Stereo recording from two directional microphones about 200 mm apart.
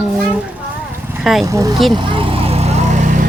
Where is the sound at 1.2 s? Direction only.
Centre (ahead or behind).